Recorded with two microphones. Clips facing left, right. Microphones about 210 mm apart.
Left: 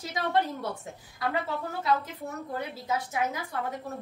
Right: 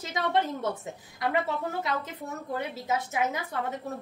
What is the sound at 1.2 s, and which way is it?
A woman's voice, 20° right (ahead or behind).